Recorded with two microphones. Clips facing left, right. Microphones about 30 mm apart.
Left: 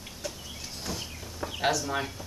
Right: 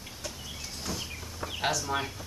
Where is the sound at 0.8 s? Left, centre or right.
Centre.